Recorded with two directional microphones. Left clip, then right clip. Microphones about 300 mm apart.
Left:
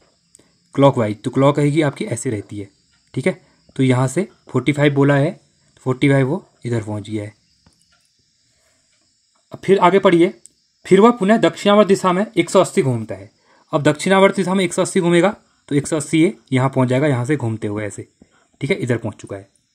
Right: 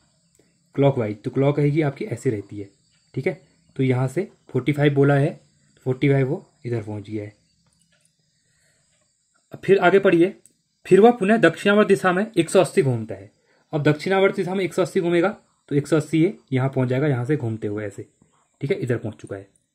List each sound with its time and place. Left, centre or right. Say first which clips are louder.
0.7 s speech: left 6 dB; left
9.5 s speech: left 3 dB; centre